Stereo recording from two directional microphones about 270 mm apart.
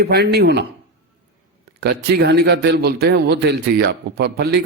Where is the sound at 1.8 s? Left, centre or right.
Right.